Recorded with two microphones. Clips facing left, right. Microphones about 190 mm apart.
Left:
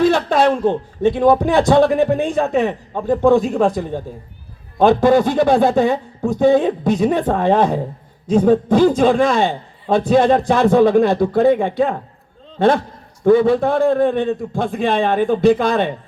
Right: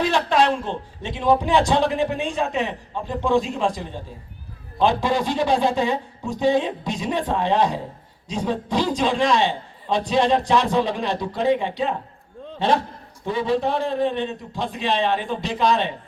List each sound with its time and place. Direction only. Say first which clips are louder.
0.0 s a man's voice: left 5 dB; 50° left (ahead or behind)